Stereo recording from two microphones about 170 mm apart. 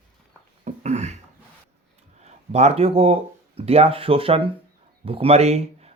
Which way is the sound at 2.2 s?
40° right (ahead or behind).